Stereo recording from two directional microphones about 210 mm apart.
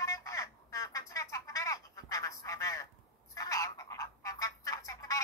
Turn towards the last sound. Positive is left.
turn(degrees=15)  # may be behind; listen again after turning